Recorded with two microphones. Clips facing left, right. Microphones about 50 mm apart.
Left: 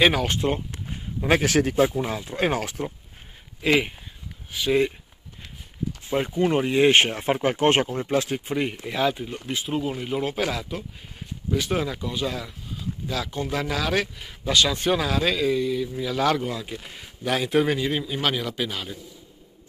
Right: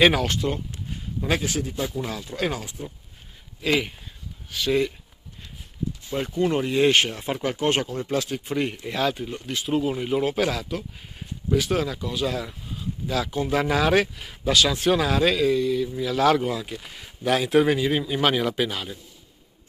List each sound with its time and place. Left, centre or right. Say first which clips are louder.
0.0 s speech: right 1 dB; centre
1.4 s speech: left 7 dB; left
1.9 s speech: left 3 dB; left
2.6 s speech: left 6 dB; left
3.6 s speech: left 2 dB; left
6.0 s speech: left 2 dB; left
8.5 s speech: even; centre
14.1 s speech: right 1 dB; centre